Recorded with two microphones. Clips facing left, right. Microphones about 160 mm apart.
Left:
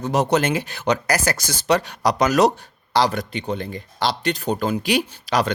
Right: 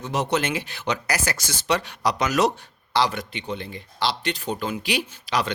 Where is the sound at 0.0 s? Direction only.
40° left (ahead or behind).